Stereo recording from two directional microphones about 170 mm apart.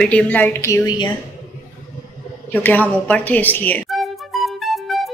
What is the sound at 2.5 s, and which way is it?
Speech, 10° left (ahead or behind).